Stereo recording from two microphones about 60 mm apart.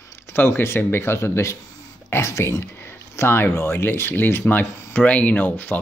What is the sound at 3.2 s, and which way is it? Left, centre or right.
Speech, left.